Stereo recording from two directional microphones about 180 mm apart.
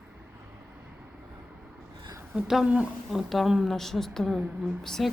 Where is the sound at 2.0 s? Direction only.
20° right (ahead or behind).